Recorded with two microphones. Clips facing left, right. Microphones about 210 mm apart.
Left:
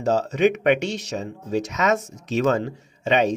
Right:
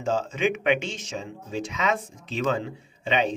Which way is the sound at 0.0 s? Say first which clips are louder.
Left 6 dB; 40° left (ahead or behind).